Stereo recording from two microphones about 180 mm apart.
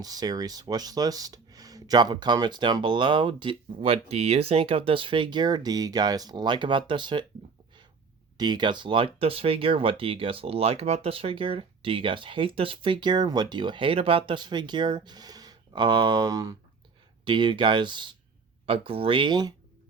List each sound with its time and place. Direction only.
0.0 s speech: 20° right (ahead or behind)
8.4 s speech: 25° right (ahead or behind)